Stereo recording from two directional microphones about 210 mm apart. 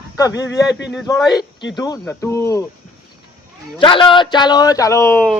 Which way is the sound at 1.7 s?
20° left (ahead or behind).